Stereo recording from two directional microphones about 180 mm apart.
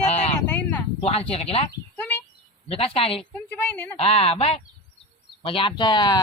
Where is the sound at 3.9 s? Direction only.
35° left (ahead or behind).